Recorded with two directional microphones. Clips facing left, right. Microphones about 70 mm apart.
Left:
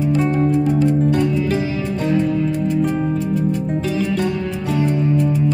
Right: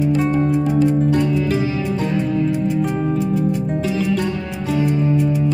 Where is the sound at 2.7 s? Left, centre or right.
Centre.